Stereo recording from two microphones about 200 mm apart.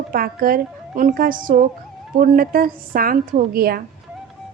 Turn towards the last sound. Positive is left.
turn(degrees=-50)  # may be behind; listen again after turning